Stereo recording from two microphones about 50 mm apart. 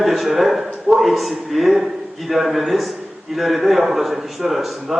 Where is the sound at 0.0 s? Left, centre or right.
Centre.